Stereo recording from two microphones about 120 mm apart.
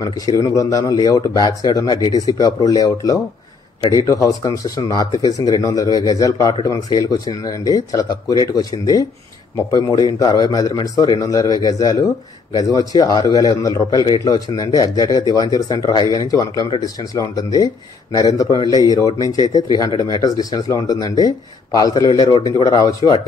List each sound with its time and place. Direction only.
0.0 s speech: 30° left (ahead or behind)